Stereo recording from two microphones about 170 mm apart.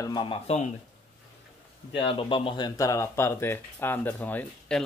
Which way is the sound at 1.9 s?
30° left (ahead or behind).